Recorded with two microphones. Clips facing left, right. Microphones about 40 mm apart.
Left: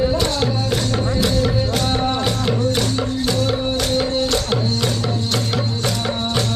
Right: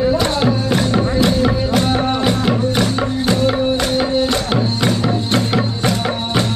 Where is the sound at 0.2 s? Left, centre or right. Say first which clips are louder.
Right 4 dB; centre.